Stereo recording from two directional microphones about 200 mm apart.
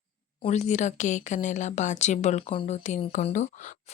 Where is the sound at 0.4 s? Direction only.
35° left (ahead or behind).